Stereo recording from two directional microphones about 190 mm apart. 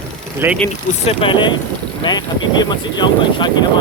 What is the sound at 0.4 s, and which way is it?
Speech, 10° right (ahead or behind).